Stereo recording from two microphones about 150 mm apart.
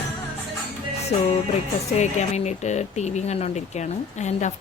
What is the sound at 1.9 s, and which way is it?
Speech, 50° left (ahead or behind).